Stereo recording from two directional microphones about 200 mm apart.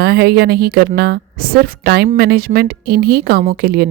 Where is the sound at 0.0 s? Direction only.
55° right (ahead or behind).